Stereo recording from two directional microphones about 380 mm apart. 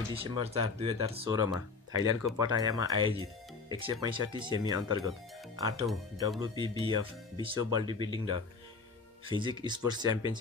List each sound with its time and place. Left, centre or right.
0.1 s speech: centre
3.2 s music: centre
3.8 s speech: centre